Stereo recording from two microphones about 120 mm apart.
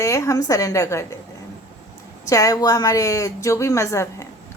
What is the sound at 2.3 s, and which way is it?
Speech, 30° left (ahead or behind).